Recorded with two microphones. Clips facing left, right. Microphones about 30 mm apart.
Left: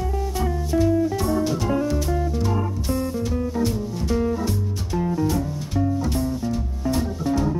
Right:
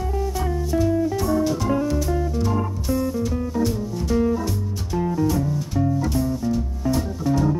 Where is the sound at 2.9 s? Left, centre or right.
Centre.